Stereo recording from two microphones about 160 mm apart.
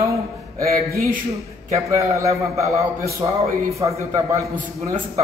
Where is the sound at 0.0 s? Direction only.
20° right (ahead or behind).